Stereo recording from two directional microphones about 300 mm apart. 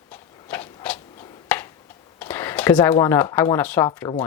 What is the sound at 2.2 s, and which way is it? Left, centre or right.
Speech, centre.